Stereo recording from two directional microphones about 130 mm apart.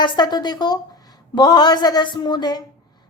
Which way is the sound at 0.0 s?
35° left (ahead or behind).